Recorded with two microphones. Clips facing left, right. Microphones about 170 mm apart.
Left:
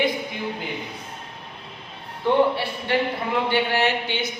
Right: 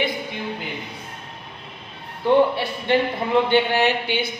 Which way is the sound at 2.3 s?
15° right (ahead or behind).